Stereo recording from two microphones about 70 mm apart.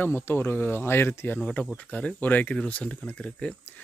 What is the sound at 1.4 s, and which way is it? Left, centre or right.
Speech, centre.